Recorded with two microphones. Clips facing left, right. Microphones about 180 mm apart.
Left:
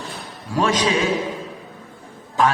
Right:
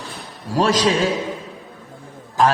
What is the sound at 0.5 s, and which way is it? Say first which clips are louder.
Speech: right 2 dB; 35° right (ahead or behind).